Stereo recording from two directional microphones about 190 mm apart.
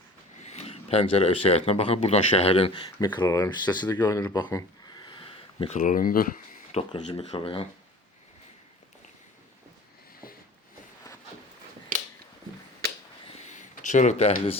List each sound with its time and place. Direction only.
0.4 s speech: 35° left (ahead or behind)
3.0 s speech: 20° left (ahead or behind); by 6.2 s 45° left (ahead or behind)
6.7 s speech: 30° left (ahead or behind)
13.5 s a sound: 40° left (ahead or behind)